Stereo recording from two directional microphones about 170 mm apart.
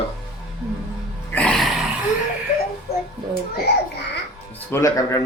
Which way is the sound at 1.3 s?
5° left (ahead or behind).